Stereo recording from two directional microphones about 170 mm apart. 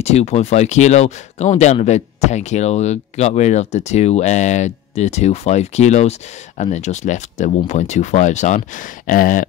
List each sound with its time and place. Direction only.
0.0 s speech: 40° left (ahead or behind)